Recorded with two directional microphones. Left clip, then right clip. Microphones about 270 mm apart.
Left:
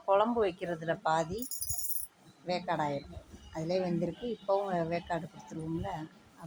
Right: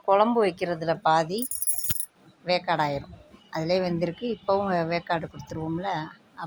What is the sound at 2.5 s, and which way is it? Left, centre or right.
Speech, right.